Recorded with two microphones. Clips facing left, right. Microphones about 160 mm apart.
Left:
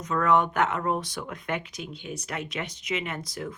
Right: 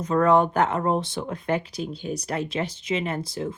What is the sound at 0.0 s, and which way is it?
Speech, 30° right (ahead or behind).